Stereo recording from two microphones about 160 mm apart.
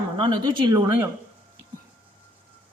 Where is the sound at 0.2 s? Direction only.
25° right (ahead or behind).